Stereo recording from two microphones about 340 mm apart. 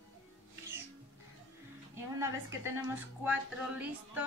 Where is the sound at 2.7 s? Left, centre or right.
Centre.